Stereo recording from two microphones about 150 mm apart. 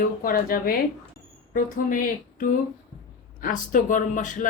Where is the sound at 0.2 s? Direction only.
75° left (ahead or behind).